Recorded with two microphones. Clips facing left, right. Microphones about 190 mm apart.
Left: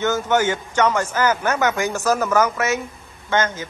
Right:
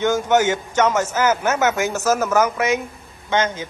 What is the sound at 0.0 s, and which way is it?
Speech, 10° right (ahead or behind).